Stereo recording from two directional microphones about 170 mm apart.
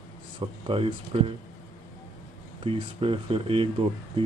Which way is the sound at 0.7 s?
30° right (ahead or behind).